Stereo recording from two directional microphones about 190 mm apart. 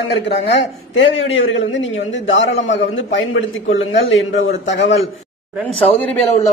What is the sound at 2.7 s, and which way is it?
Speech, 80° left.